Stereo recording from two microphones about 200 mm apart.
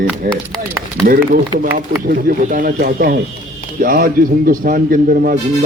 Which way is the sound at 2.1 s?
45° right (ahead or behind).